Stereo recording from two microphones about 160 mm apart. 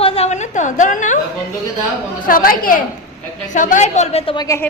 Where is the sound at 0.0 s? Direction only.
35° left (ahead or behind).